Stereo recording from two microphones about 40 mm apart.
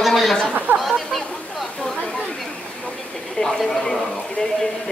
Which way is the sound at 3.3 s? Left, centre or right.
Centre.